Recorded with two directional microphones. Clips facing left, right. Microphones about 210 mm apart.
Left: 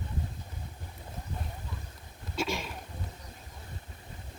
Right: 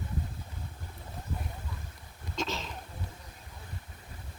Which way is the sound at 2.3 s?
10° left (ahead or behind).